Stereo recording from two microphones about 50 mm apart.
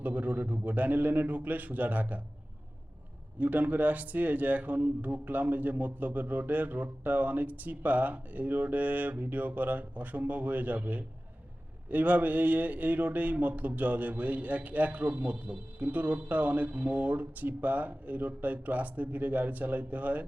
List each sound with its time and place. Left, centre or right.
0.0 s speech: right
3.3 s speech: right